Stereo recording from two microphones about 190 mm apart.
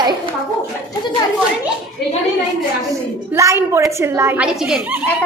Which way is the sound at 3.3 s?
15° right (ahead or behind).